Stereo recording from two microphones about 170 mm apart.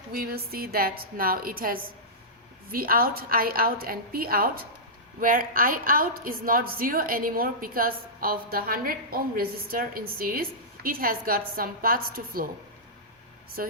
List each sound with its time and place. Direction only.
0.1 s a woman's voice: 65° right (ahead or behind)
13.6 s speech: 55° right (ahead or behind)